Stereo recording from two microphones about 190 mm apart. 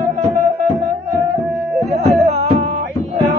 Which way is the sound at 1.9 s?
35° right (ahead or behind).